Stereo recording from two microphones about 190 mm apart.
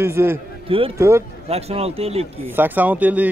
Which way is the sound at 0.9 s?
15° right (ahead or behind).